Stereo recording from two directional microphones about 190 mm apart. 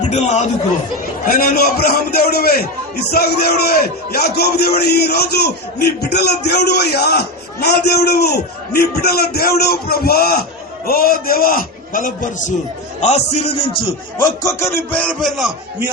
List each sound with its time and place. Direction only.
0.0 s speech: 35° left (ahead or behind)
1.3 s a man's voice: 50° left (ahead or behind)
14.4 s a man's voice: 10° left (ahead or behind)